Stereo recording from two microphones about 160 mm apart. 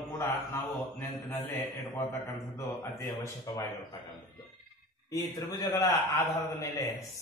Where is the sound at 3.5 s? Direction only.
20° left (ahead or behind).